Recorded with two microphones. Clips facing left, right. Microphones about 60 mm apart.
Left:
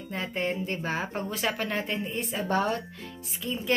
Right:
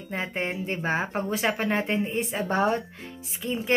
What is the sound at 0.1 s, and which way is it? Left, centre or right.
Speech, centre.